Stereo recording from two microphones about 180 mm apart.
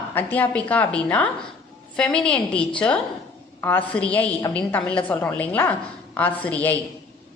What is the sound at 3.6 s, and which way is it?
A woman's voice, 10° left (ahead or behind).